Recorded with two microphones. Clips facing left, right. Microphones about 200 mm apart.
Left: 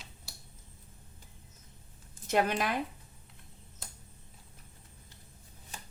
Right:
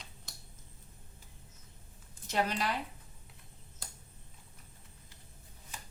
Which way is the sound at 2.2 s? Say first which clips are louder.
Left 4 dB; 55° left (ahead or behind).